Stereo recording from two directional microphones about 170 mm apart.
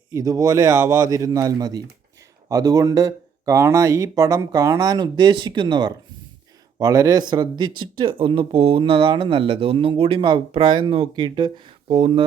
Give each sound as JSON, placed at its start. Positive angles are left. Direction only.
{"t": 0.1, "sound": "speech", "side_deg": -20}
{"t": 11.9, "sound": "speech", "side_deg": -40}